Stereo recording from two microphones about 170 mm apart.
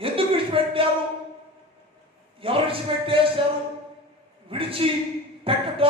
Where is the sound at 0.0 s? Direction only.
30° right (ahead or behind).